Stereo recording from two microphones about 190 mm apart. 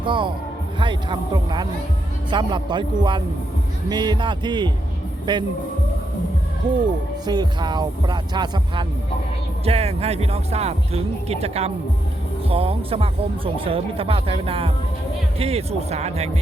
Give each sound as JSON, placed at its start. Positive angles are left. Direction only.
{"t": 0.0, "sound": "speech", "side_deg": -25}
{"t": 7.3, "sound": "speech", "side_deg": -20}